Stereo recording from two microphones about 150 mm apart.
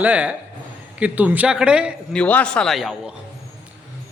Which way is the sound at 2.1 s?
10° left (ahead or behind).